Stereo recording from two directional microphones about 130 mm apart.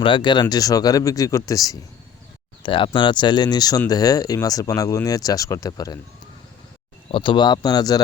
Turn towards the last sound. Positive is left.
turn(degrees=30)  # may be behind; listen again after turning